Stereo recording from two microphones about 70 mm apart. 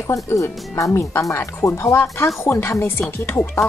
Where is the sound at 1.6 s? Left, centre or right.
Left.